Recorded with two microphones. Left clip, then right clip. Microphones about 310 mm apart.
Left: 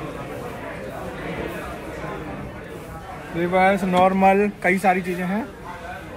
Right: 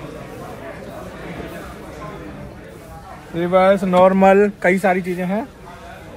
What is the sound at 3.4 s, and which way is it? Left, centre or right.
Speech, right.